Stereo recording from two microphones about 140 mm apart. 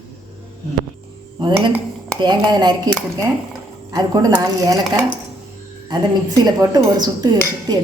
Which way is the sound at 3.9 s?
30° right (ahead or behind).